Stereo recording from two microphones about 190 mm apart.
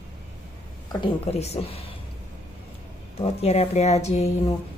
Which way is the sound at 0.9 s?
30° left (ahead or behind).